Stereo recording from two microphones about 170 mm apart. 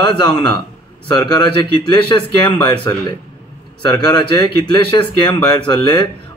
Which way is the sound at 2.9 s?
20° left (ahead or behind).